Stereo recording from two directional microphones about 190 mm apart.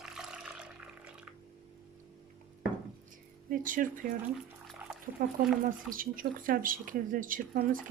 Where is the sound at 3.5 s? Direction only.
45° right (ahead or behind).